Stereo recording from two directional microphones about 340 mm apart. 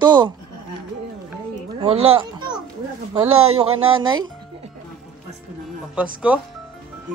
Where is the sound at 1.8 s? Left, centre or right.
Centre.